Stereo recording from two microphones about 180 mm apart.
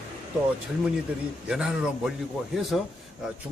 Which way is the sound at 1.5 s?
5° right (ahead or behind).